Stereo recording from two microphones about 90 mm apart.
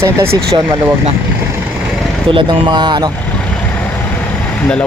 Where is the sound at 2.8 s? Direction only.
50° right (ahead or behind).